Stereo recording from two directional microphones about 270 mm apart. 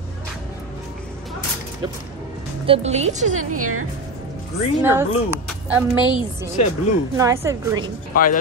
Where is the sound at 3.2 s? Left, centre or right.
Right.